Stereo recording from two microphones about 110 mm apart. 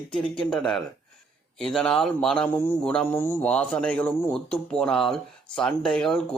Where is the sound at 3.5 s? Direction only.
10° left (ahead or behind).